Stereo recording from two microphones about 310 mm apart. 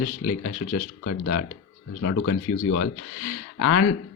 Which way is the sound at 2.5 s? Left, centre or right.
Left.